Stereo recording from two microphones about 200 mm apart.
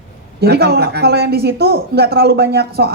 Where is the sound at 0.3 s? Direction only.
55° right (ahead or behind).